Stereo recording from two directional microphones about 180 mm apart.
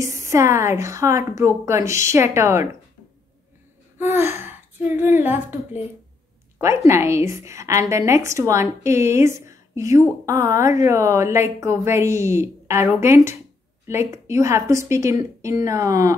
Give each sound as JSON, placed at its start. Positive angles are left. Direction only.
{"t": 0.0, "sound": "a woman's voice", "side_deg": -15}
{"t": 4.0, "sound": "a sound", "side_deg": -15}
{"t": 6.6, "sound": "a woman's voice", "side_deg": -15}